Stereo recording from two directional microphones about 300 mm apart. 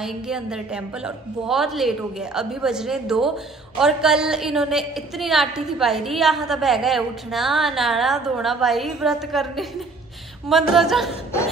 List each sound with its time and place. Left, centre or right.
0.0 s a woman's voice: centre